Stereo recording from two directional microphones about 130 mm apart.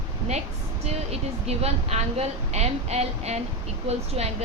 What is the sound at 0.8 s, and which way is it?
Speech, 55° right (ahead or behind).